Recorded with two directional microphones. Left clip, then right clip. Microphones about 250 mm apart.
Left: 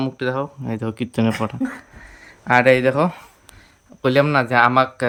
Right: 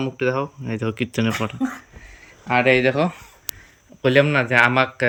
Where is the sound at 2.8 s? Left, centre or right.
Centre.